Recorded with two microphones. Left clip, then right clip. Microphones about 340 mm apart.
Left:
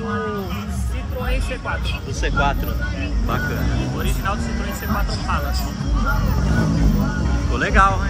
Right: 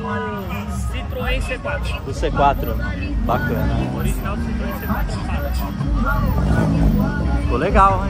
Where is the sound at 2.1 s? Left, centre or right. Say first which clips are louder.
Right 4 dB; centre.